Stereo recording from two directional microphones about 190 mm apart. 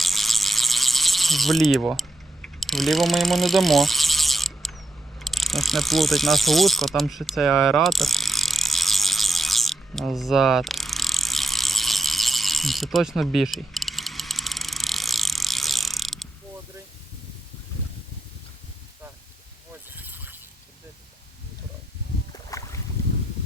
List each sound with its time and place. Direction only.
0.0 s ratchet: centre (ahead or behind)
5.2 s pulleys: centre (ahead or behind)
20.0 s a sound: 10° right (ahead or behind)
22.3 s boat: 15° left (ahead or behind)